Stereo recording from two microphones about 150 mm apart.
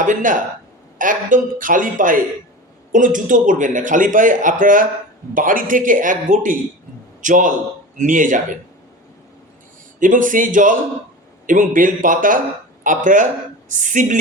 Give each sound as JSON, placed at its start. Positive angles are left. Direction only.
{"t": 0.0, "sound": "a man's voice", "side_deg": -60}
{"t": 10.0, "sound": "a man's voice", "side_deg": -60}